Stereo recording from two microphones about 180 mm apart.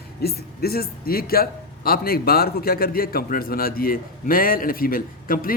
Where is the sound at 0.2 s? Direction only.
60° left (ahead or behind).